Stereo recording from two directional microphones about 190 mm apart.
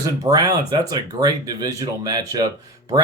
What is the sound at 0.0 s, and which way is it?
Speech, 20° right (ahead or behind).